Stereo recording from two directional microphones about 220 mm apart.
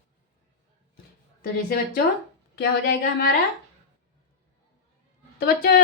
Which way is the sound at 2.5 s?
45° left (ahead or behind).